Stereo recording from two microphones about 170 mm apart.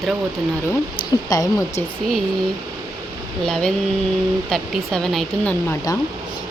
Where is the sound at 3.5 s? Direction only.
5° left (ahead or behind).